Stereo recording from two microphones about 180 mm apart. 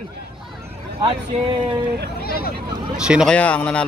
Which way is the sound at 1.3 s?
35° right (ahead or behind).